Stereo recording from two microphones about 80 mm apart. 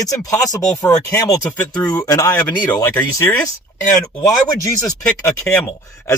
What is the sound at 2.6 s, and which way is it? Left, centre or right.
Speech, left.